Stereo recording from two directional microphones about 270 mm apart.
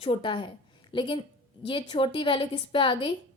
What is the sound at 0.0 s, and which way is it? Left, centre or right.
A woman's voice, centre.